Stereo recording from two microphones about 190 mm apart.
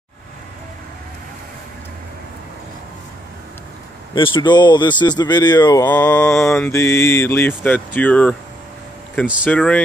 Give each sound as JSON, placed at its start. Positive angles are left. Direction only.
{"t": 4.1, "sound": "speech", "side_deg": 25}
{"t": 5.9, "sound": "mantra", "side_deg": 10}
{"t": 9.5, "sound": "speech", "side_deg": 5}